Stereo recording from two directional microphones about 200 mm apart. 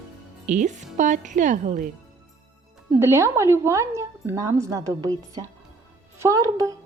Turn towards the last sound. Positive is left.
turn(degrees=-15)  # may be behind; listen again after turning